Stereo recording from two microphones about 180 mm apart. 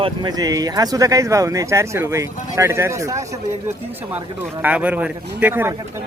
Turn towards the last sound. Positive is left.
turn(degrees=-10)  # may be behind; listen again after turning